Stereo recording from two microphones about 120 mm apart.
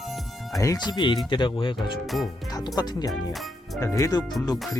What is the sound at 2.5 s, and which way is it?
Speech, 30° left (ahead or behind).